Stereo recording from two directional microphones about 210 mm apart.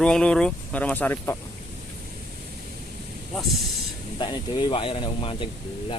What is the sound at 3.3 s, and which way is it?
Speech, centre (ahead or behind).